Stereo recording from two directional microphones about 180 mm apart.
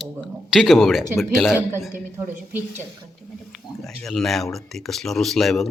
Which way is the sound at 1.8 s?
10° right (ahead or behind).